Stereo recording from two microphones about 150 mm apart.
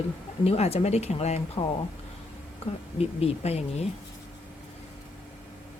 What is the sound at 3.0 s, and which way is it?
Speech, 45° left (ahead or behind).